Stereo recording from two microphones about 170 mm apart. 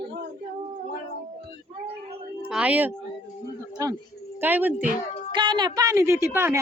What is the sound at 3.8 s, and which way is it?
Speech, 20° right (ahead or behind).